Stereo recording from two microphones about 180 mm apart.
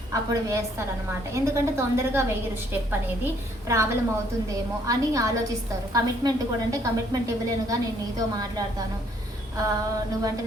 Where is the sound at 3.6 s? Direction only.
15° right (ahead or behind).